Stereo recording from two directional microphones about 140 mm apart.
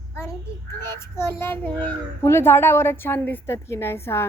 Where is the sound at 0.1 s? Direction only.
20° left (ahead or behind).